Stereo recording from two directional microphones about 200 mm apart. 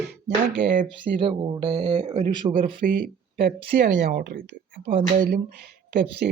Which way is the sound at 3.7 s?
55° right (ahead or behind).